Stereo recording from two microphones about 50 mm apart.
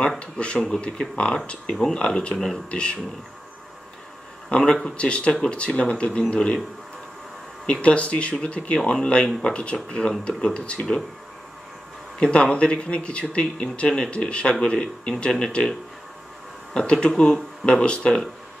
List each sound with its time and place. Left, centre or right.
0.2 s speech: left
4.5 s speech: centre
7.8 s speech: left
12.2 s speech: centre
16.7 s speech: centre